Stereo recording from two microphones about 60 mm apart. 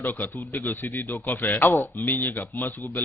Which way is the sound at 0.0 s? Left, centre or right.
Left.